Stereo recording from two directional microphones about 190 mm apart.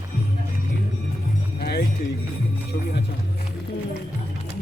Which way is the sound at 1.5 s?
55° left (ahead or behind).